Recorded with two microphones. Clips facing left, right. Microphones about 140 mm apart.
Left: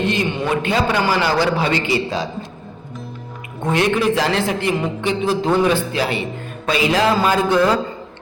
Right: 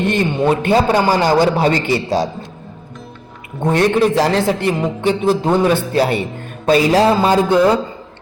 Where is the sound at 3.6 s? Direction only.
40° right (ahead or behind).